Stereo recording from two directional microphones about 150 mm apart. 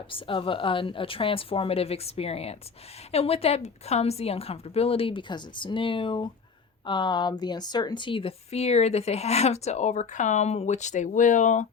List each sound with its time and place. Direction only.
0.1 s a woman's voice: 35° left (ahead or behind); by 11.6 s 55° left (ahead or behind)